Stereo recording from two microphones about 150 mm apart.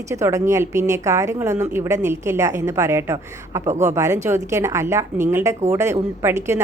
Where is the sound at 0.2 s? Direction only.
20° right (ahead or behind).